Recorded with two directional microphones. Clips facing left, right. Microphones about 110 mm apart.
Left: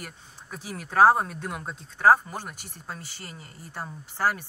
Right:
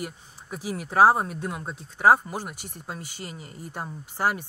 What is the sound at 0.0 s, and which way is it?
Speech, 10° right (ahead or behind).